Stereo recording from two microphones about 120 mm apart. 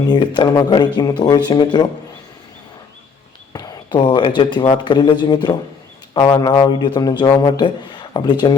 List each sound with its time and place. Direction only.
0.1 s speech: 40° left (ahead or behind)
3.5 s speech: 35° left (ahead or behind)